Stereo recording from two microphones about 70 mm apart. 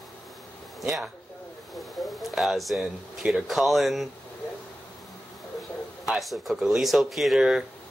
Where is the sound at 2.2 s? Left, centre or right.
Centre.